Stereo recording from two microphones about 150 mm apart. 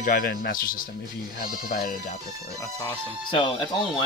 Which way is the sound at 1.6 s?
70° left (ahead or behind).